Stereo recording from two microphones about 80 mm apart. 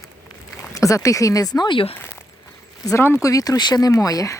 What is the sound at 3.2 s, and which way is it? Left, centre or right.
Speech, left.